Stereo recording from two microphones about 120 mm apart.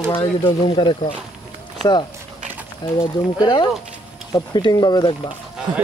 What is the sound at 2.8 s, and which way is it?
Speech, 35° left (ahead or behind).